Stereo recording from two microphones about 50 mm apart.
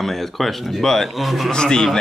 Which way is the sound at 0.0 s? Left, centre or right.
Centre.